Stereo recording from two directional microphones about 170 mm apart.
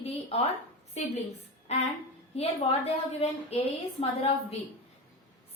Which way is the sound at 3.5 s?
35° left (ahead or behind).